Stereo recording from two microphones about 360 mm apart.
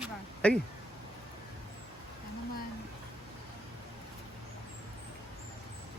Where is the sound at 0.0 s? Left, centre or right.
Centre.